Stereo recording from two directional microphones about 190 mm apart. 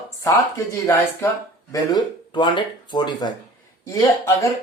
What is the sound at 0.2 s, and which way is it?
Speech, 15° left (ahead or behind).